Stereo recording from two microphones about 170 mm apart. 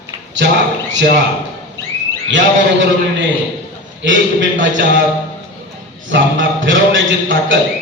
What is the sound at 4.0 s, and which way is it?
Speech, 90° right.